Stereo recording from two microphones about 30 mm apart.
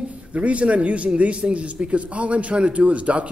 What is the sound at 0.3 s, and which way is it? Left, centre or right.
A man's voice, right.